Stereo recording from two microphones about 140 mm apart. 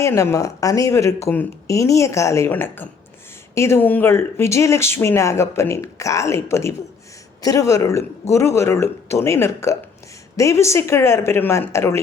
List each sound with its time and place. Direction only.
0.0 s speech: 20° left (ahead or behind)